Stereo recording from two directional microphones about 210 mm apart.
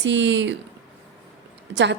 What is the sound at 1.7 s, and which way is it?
Speech, 55° right (ahead or behind).